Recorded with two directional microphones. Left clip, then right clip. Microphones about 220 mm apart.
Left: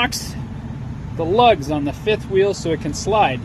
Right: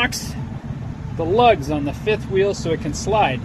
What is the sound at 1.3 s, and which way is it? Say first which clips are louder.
Speech: left 1 dB; 30° left (ahead or behind).